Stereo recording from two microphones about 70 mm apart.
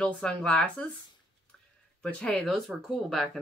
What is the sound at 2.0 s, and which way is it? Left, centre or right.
Speech, centre.